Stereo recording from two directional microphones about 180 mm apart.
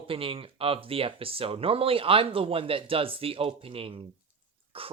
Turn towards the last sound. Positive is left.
turn(degrees=-30)  # may be behind; listen again after turning